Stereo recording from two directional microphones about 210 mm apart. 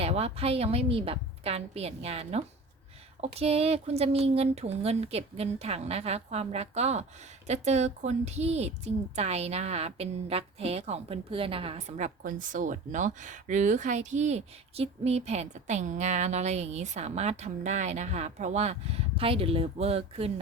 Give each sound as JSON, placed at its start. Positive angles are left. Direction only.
{"t": 0.0, "sound": "a woman's voice", "side_deg": -30}